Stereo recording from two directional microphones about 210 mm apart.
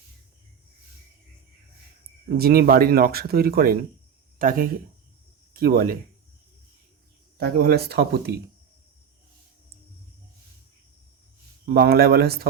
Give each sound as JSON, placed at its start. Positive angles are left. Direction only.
{"t": 2.4, "sound": "speech", "side_deg": -45}
{"t": 7.3, "sound": "speech", "side_deg": -50}
{"t": 11.6, "sound": "speech", "side_deg": -50}